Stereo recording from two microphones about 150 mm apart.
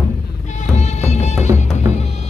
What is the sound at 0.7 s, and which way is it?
Music, 50° left (ahead or behind).